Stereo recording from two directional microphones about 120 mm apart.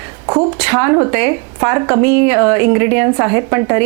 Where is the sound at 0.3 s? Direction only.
20° right (ahead or behind).